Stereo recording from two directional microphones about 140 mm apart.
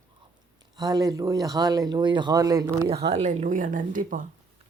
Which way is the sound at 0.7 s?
25° right (ahead or behind).